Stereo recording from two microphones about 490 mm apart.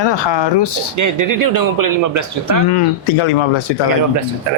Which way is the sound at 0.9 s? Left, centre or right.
Right.